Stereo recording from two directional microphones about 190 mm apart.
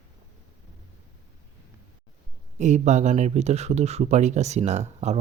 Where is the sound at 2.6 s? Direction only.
40° right (ahead or behind).